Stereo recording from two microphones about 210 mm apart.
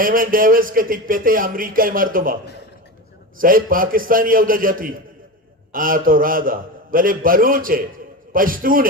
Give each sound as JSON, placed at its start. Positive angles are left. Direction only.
{"t": 0.0, "sound": "speech", "side_deg": -40}